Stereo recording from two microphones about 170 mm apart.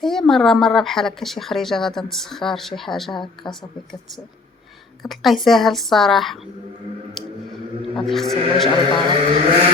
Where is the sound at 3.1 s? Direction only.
25° left (ahead or behind).